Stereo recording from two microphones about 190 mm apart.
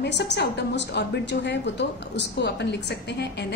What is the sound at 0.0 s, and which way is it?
A woman's voice, 65° left (ahead or behind).